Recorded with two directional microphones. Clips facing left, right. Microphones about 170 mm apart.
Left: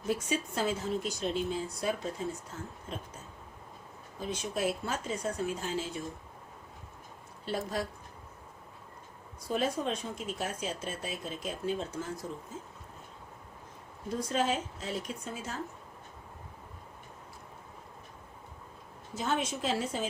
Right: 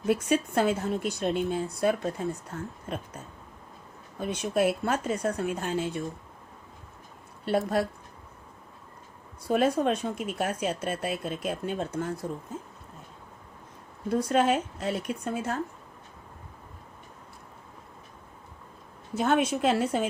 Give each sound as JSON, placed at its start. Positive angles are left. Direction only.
{"t": 0.1, "sound": "speech", "side_deg": -60}
{"t": 4.2, "sound": "speech", "side_deg": -65}
{"t": 7.4, "sound": "speech", "side_deg": -60}
{"t": 9.4, "sound": "speech", "side_deg": -60}
{"t": 14.1, "sound": "speech", "side_deg": -60}
{"t": 19.1, "sound": "speech", "side_deg": -60}